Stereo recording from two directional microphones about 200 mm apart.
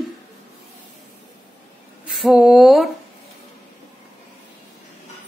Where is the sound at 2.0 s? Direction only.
5° right (ahead or behind).